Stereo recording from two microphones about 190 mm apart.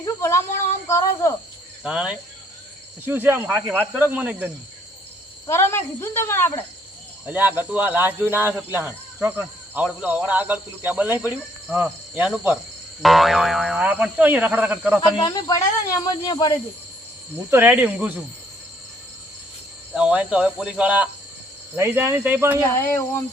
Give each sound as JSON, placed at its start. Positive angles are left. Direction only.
{"t": 0.0, "sound": "speech", "side_deg": 15}
{"t": 1.8, "sound": "speech", "side_deg": -5}
{"t": 5.5, "sound": "speech", "side_deg": 15}
{"t": 7.3, "sound": "speech", "side_deg": -10}
{"t": 15.2, "sound": "speech", "side_deg": 20}
{"t": 17.5, "sound": "speech", "side_deg": -10}
{"t": 19.9, "sound": "speech", "side_deg": -5}
{"t": 22.7, "sound": "speech", "side_deg": 10}